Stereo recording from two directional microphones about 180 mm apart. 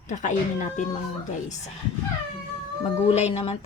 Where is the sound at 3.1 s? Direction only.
35° left (ahead or behind).